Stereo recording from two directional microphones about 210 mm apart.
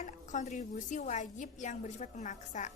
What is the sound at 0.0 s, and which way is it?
A woman's voice, 35° left (ahead or behind).